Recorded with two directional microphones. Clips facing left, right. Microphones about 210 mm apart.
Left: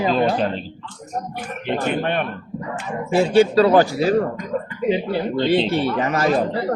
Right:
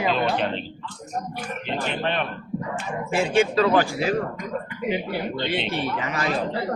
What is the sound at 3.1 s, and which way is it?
Speech, 35° left (ahead or behind).